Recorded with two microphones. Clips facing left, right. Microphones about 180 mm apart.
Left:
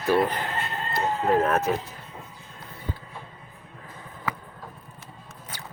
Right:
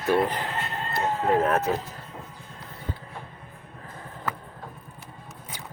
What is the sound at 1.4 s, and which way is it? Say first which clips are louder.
Speech: even; 20° right (ahead or behind).